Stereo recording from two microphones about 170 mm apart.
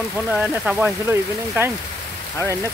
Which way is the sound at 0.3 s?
10° right (ahead or behind).